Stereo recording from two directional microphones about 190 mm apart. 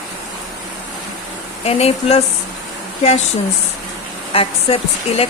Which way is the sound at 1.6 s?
35° left (ahead or behind).